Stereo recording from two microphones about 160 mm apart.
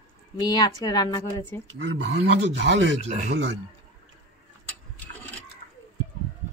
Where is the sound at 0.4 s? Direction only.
25° left (ahead or behind).